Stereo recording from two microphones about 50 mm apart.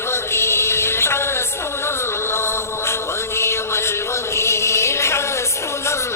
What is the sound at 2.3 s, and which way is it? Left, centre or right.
Mantra, left.